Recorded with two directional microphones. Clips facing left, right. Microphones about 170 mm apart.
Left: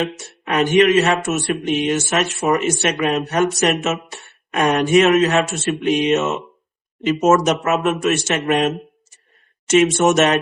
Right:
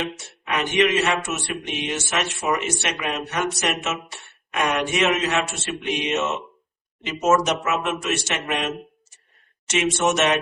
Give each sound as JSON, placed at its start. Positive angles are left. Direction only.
{"t": 0.0, "sound": "speech", "side_deg": 40}
{"t": 7.3, "sound": "speech", "side_deg": 50}